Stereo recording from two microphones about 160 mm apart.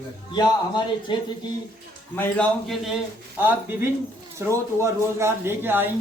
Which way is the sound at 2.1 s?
10° left (ahead or behind).